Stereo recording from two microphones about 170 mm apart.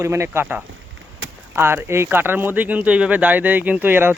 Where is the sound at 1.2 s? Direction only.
90° right.